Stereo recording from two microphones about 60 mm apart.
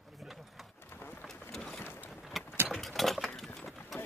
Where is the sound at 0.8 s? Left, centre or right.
Left.